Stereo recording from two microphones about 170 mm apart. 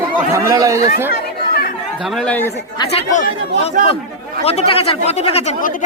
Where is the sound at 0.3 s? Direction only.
20° right (ahead or behind).